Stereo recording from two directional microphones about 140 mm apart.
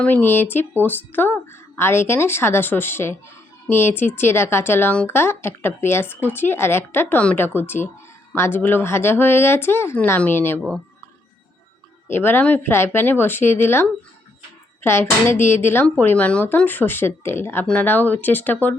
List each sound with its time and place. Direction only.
0.0 s a woman's voice: 15° left (ahead or behind)
12.0 s a woman's voice: 15° left (ahead or behind)